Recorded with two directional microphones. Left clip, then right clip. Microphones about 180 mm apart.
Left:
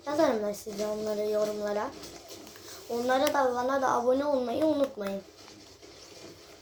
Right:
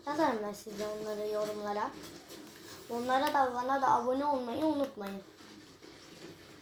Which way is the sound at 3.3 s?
15° left (ahead or behind).